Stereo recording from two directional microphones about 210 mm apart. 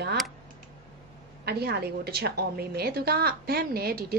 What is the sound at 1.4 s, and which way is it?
A woman's voice, 50° right (ahead or behind).